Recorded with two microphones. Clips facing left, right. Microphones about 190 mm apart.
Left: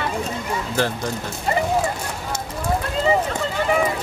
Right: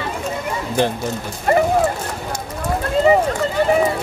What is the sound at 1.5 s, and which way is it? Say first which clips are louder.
Speech: right 7 dB; 55° right (ahead or behind).